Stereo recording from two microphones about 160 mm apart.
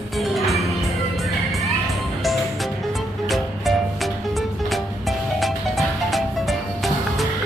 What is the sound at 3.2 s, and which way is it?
Music, centre (ahead or behind).